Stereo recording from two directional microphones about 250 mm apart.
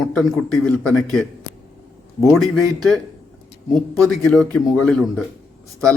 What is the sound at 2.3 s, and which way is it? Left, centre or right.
Speech, centre.